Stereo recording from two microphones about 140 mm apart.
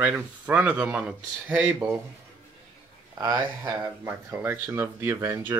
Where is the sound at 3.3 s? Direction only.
15° right (ahead or behind).